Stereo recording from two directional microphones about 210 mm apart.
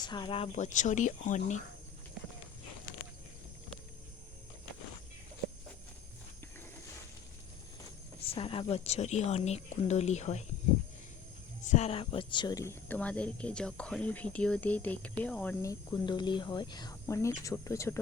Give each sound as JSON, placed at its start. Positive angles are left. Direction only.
{"t": 0.0, "sound": "a woman's voice", "side_deg": 20}
{"t": 8.3, "sound": "a woman's voice", "side_deg": 25}
{"t": 11.7, "sound": "speech", "side_deg": 30}